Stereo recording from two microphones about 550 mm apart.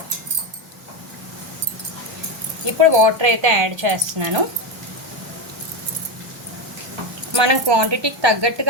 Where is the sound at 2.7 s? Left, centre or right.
Right.